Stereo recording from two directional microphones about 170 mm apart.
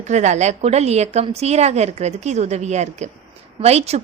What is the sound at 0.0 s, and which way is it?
Speech, 45° right (ahead or behind).